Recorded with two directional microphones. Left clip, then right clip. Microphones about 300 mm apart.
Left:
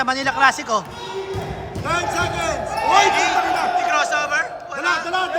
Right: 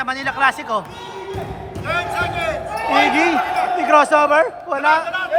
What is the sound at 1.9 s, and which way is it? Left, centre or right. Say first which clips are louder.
Speech: even; centre.